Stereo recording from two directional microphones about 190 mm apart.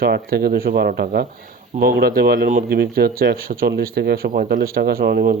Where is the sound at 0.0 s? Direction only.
55° right (ahead or behind).